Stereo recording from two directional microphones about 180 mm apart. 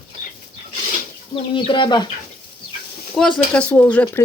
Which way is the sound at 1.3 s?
30° left (ahead or behind).